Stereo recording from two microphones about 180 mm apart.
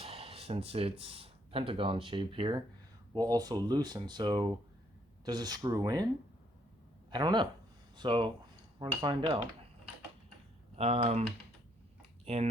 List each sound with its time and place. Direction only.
0.0 s speech: 35° right (ahead or behind)
7.1 s speech: 25° right (ahead or behind)
10.8 s speech: 35° right (ahead or behind)